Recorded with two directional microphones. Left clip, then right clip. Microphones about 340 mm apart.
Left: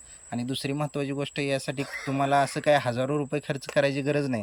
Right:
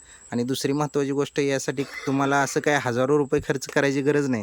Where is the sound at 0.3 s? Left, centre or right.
Centre.